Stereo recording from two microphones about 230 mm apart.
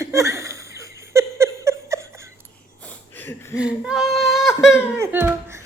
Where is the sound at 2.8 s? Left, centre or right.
Centre.